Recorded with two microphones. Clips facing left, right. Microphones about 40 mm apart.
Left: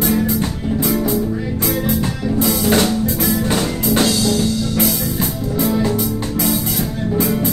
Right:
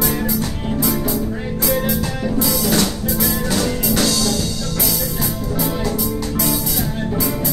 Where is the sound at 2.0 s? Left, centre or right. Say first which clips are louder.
Left 2 dB; left.